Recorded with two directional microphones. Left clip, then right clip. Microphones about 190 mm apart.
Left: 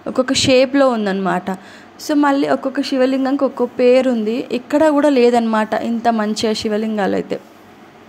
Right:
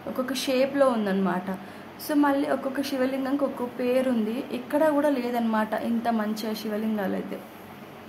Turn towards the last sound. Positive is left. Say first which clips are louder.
# left 11 dB
turn(degrees=35)  # may be behind; listen again after turning